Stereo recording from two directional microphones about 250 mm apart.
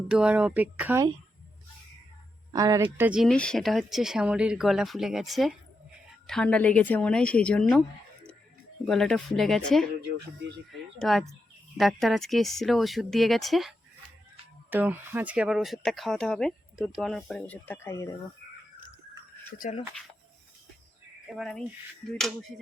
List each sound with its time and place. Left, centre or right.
0.1 s speech: centre
2.5 s speech: centre
8.9 s speech: centre
19.5 s speech: left
21.2 s speech: centre